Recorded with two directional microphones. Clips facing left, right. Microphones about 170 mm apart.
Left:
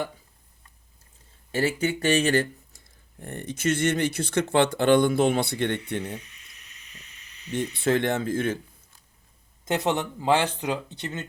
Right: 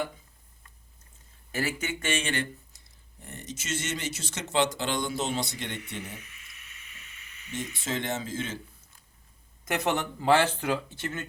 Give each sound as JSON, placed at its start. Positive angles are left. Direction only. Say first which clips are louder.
{"t": 1.5, "sound": "speech", "louder": "left 7 dB", "side_deg": 30}
{"t": 6.1, "sound": "a sound", "louder": "left 7 dB", "side_deg": 35}
{"t": 7.5, "sound": "speech", "louder": "left 9 dB", "side_deg": 60}
{"t": 9.6, "sound": "speech", "louder": "left 3 dB", "side_deg": 20}